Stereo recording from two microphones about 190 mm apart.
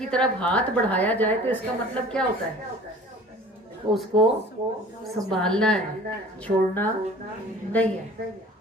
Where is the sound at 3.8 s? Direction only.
25° right (ahead or behind).